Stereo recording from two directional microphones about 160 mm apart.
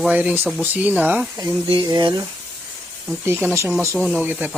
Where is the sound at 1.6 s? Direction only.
35° right (ahead or behind).